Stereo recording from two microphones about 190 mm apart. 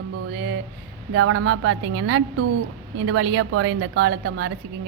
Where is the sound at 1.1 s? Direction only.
90° right; by 4.5 s 70° right (ahead or behind).